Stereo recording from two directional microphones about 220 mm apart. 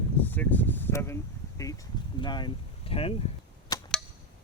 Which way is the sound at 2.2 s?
20° left (ahead or behind).